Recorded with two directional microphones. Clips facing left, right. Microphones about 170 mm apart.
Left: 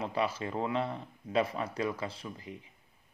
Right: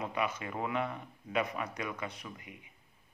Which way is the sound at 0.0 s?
30° left (ahead or behind).